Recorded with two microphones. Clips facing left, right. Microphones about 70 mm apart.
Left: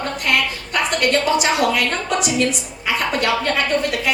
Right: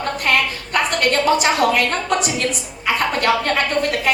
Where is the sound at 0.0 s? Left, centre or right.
Right.